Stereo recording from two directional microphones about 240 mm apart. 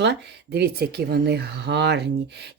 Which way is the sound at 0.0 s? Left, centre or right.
Right.